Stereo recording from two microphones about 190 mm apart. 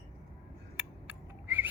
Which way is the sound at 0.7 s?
10° right (ahead or behind).